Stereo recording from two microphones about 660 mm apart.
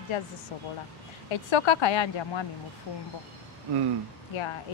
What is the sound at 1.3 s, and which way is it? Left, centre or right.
Speech, left.